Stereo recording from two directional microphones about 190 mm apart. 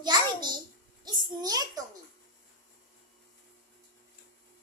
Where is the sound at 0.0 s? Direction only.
25° right (ahead or behind).